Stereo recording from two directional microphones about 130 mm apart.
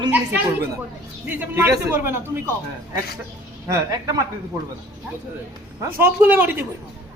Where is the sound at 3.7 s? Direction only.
25° right (ahead or behind).